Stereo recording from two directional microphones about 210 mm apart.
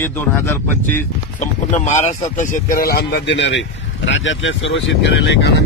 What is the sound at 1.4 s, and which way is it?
A man's voice, 35° left (ahead or behind).